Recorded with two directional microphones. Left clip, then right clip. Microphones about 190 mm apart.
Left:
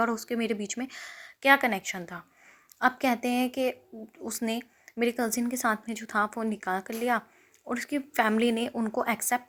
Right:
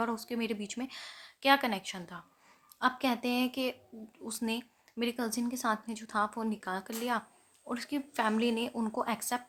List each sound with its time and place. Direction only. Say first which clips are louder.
0.0 s a woman's voice: left 6 dB; 20° left (ahead or behind)